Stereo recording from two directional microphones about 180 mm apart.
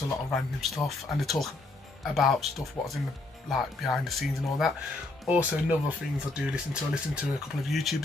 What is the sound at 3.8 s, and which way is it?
Speech, centre (ahead or behind).